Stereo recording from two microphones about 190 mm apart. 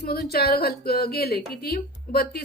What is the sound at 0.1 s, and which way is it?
A woman's voice, 55° left (ahead or behind).